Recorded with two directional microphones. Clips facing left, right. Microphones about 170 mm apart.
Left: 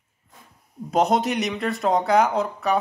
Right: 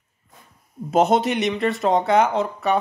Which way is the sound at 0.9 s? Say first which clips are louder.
Right 2 dB; centre (ahead or behind).